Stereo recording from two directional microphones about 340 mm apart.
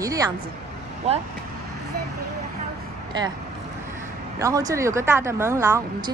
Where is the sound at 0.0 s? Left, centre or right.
Centre.